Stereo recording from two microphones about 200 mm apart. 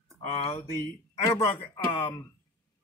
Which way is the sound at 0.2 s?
30° left (ahead or behind).